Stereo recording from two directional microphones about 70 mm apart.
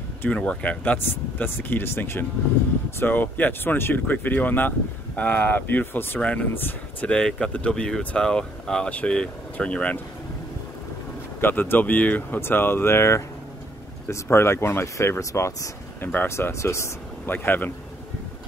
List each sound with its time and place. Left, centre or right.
0.3 s speech: centre
0.9 s speech: left
7.1 s speech: centre
11.4 s speech: left
17.3 s speech: left